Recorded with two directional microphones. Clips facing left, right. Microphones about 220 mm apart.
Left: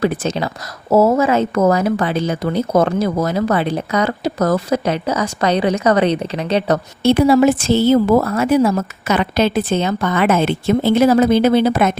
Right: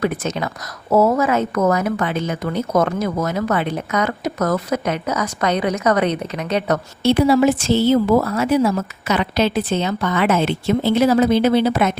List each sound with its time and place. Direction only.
0.0 s speech: 30° left (ahead or behind)
7.0 s a woman's voice: 50° left (ahead or behind)